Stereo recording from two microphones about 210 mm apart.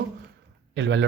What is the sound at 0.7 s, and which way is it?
Speech, 60° right (ahead or behind).